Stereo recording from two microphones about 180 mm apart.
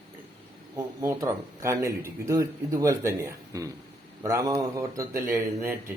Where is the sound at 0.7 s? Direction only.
15° right (ahead or behind).